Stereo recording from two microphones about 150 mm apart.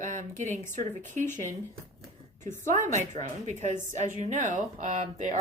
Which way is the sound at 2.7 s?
55° right (ahead or behind).